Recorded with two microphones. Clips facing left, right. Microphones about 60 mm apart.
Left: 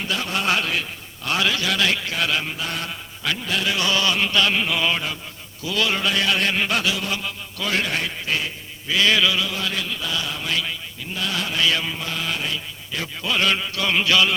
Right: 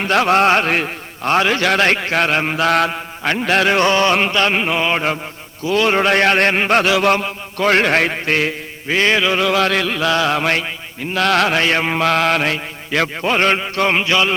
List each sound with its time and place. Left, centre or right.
0.0 s mantra: right
0.4 s a man's voice: right
1.6 s a man's voice: right
2.9 s a man's voice: right
4.3 s a sound: right
5.6 s a man's voice: right
6.9 s mantra: right
7.3 s mantra: right
8.9 s a sound: right
9.4 s mantra: right
11.6 s mantra: right
13.2 s a sound: right